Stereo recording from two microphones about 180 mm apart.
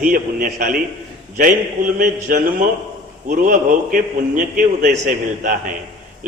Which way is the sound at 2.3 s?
50° right (ahead or behind).